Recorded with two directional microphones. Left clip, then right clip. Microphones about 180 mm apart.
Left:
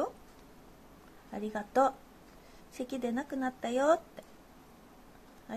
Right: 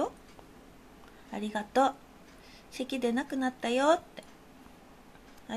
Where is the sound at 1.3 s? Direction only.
15° right (ahead or behind).